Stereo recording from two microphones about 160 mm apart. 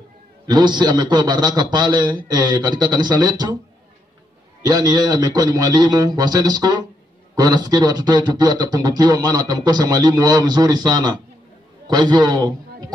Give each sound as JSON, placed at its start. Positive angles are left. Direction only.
{"t": 0.5, "sound": "speech", "side_deg": -30}
{"t": 4.6, "sound": "a man's voice", "side_deg": -25}